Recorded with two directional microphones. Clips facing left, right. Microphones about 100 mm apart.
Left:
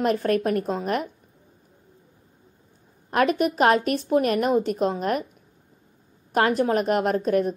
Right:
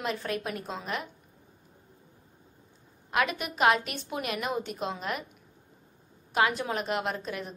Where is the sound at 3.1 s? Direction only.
45° left (ahead or behind).